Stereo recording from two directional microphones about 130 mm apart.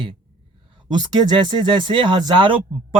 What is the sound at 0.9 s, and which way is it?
Speech, 35° right (ahead or behind).